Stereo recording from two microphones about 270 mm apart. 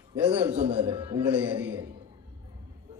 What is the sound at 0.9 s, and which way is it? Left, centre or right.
Speech, centre.